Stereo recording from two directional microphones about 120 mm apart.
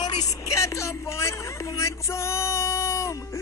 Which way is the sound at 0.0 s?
35° left (ahead or behind).